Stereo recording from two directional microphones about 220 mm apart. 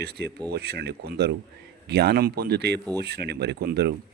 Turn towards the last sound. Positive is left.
turn(degrees=-45)  # may be behind; listen again after turning